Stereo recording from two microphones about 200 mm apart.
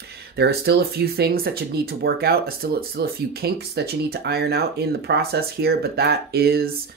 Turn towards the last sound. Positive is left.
turn(degrees=-50)  # may be behind; listen again after turning